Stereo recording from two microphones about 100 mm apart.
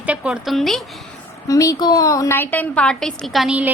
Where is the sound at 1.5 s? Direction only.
35° left (ahead or behind).